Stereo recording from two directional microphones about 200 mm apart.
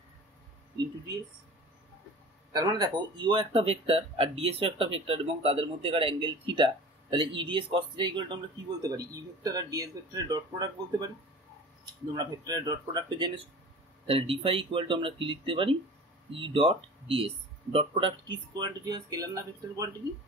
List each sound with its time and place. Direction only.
2.5 s speech: 20° right (ahead or behind)
12.2 s speech: 20° right (ahead or behind)